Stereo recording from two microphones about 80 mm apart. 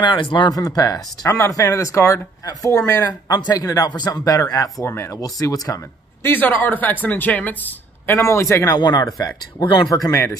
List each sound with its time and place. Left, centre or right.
0.0 s speech: left
0.5 s speech: left
4.2 s speech: left
4.8 s a man's voice: left
5.2 s speech: left
6.2 s speech: left
8.1 s a man's voice: left
8.6 s speech: left
9.6 s speech: left